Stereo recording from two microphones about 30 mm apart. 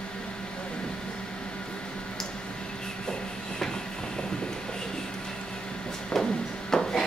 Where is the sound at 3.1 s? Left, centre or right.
Centre.